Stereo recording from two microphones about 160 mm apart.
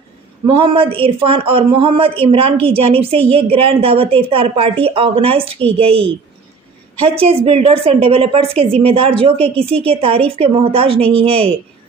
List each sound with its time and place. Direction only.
0.5 s a woman's voice: 30° right (ahead or behind)